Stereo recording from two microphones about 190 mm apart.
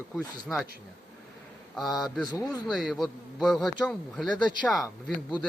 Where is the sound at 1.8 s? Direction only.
Centre (ahead or behind).